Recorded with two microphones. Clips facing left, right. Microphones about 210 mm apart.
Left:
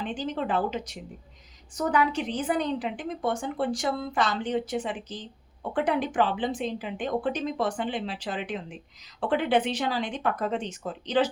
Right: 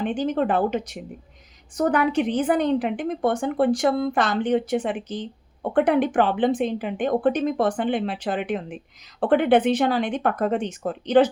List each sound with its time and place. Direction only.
0.0 s a woman's voice: 55° right (ahead or behind)